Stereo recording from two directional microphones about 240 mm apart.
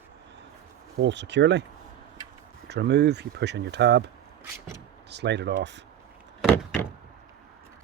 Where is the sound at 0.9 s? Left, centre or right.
Right.